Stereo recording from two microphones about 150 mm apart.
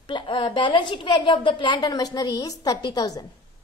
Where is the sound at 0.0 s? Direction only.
30° left (ahead or behind).